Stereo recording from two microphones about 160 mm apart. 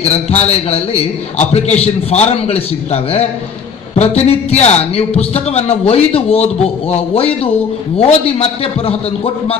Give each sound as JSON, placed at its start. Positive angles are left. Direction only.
{"t": 0.5, "sound": "speech", "side_deg": 40}